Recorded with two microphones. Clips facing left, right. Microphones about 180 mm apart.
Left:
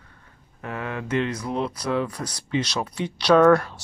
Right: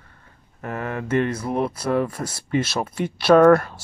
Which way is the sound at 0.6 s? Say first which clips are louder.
Right 3 dB; 45° right (ahead or behind).